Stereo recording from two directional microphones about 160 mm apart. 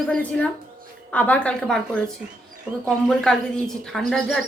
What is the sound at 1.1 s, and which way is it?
Speech, 10° left (ahead or behind).